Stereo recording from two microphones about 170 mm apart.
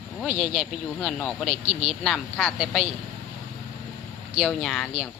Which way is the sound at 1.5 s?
40° right (ahead or behind).